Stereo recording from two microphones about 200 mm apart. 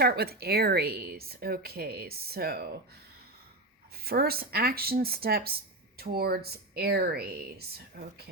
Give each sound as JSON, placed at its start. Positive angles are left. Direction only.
{"t": 0.0, "sound": "a woman's voice", "side_deg": -50}
{"t": 3.9, "sound": "a woman's voice", "side_deg": -50}